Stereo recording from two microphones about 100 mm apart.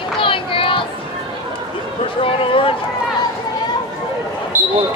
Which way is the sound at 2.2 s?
65° left (ahead or behind).